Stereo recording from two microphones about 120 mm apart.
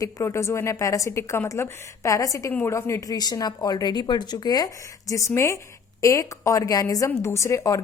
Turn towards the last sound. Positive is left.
turn(degrees=25)  # may be behind; listen again after turning